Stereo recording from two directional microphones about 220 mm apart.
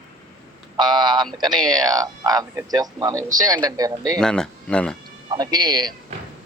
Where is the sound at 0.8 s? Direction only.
20° right (ahead or behind).